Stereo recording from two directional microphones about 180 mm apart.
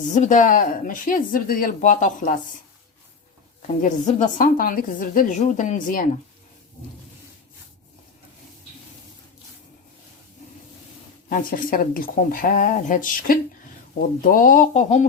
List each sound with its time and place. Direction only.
0.0 s speech: 45° left (ahead or behind)
3.8 s speech: 45° left (ahead or behind)
11.3 s speech: 50° left (ahead or behind)